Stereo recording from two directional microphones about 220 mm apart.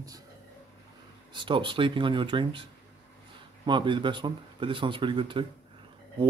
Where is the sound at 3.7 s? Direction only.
20° right (ahead or behind).